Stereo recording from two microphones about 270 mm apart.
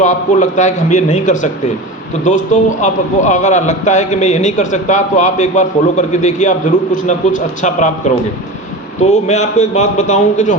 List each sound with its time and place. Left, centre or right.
0.0 s a man's voice: left